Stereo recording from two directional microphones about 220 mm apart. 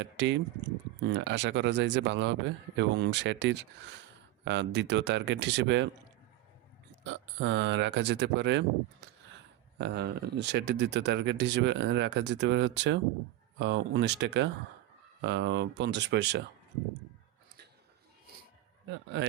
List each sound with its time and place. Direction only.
0.0 s speech: 55° right (ahead or behind)
7.0 s speech: 55° right (ahead or behind)